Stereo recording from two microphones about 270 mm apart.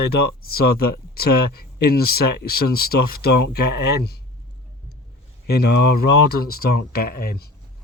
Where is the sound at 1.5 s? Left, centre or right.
Left.